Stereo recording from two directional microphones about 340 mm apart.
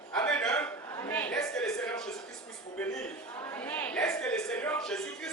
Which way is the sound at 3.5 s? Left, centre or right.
Centre.